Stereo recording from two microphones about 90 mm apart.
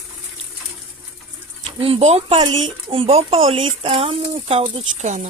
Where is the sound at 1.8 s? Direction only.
90° right.